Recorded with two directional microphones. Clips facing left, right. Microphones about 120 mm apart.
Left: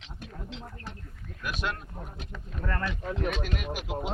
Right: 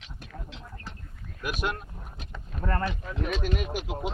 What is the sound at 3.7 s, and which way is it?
Speech, 5° left (ahead or behind).